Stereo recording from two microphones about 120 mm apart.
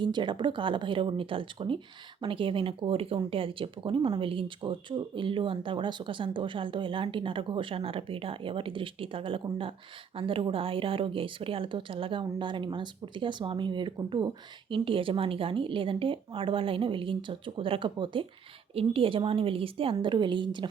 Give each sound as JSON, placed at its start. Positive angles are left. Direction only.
{"t": 0.0, "sound": "speech", "side_deg": -40}
{"t": 18.7, "sound": "speech", "side_deg": -50}